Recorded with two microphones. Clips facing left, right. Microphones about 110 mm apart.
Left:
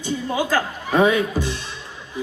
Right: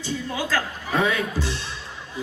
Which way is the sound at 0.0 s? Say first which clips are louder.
Left 5 dB; 15° left (ahead or behind).